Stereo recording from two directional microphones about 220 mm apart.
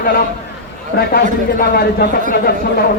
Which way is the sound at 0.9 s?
45° left (ahead or behind).